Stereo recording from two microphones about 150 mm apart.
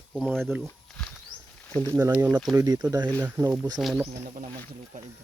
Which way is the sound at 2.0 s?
20° right (ahead or behind).